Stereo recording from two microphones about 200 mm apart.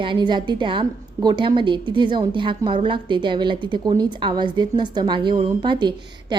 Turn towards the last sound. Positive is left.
turn(degrees=-25)  # may be behind; listen again after turning